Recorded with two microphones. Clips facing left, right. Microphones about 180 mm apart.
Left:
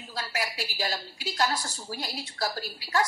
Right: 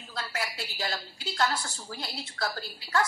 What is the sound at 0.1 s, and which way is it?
A woman's voice, 15° left (ahead or behind).